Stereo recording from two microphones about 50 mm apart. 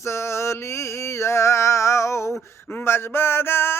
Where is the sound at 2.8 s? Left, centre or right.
Left.